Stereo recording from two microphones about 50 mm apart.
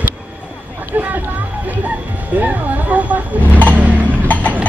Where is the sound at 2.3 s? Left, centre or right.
Right.